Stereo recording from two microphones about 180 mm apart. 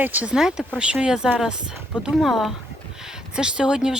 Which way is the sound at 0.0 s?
10° right (ahead or behind).